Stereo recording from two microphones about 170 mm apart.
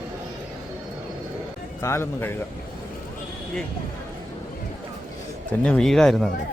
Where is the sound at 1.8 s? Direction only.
15° left (ahead or behind).